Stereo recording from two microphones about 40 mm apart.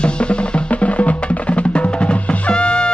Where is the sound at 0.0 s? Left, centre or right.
Left.